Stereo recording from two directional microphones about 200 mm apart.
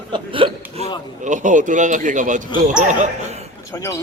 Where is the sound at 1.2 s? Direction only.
40° right (ahead or behind).